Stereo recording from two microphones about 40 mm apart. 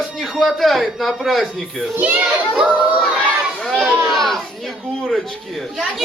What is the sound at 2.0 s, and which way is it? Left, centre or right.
Speech, right.